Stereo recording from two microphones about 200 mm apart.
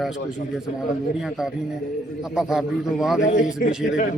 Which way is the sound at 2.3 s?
5° right (ahead or behind).